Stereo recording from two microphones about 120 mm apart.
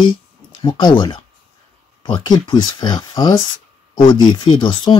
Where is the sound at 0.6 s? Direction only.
40° left (ahead or behind).